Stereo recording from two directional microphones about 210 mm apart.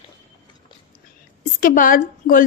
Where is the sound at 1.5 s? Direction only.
40° left (ahead or behind).